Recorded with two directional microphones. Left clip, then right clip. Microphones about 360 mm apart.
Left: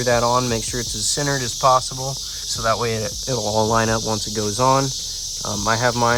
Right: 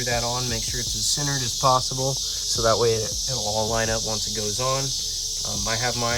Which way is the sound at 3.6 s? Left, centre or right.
Left.